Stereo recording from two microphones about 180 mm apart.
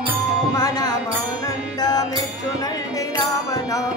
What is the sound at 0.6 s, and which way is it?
Music, 20° left (ahead or behind).